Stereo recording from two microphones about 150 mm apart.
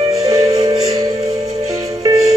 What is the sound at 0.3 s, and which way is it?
Music, 25° right (ahead or behind).